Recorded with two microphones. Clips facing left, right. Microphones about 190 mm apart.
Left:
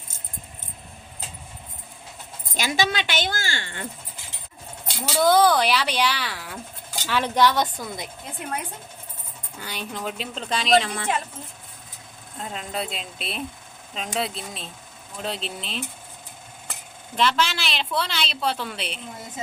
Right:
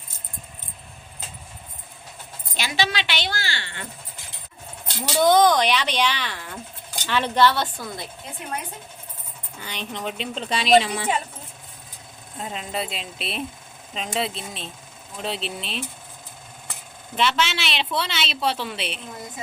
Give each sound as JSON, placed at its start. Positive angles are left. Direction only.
{"t": 2.6, "sound": "speech", "side_deg": 45}
{"t": 5.2, "sound": "speech", "side_deg": 5}
{"t": 9.6, "sound": "a woman's voice", "side_deg": 5}
{"t": 12.4, "sound": "a woman's voice", "side_deg": -5}
{"t": 17.2, "sound": "a woman's voice", "side_deg": -5}